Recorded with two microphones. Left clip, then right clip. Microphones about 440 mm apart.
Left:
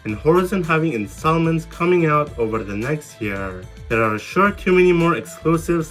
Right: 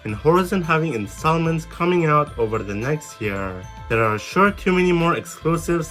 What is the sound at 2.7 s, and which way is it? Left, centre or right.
Speech, centre.